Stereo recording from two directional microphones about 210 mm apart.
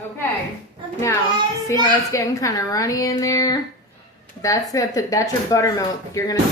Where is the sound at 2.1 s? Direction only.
15° left (ahead or behind).